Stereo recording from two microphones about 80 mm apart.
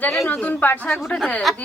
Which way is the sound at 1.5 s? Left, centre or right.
Centre.